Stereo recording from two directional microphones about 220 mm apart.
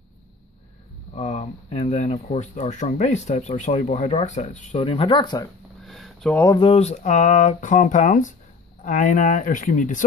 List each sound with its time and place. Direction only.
1.1 s speech: 30° left (ahead or behind)
5.9 s a sound: centre (ahead or behind)
6.4 s speech: 20° left (ahead or behind)